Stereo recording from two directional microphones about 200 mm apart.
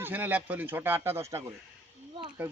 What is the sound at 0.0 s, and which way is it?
Speech, 10° right (ahead or behind).